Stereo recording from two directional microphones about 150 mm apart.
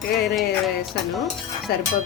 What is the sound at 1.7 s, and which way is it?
Speech, 90° left.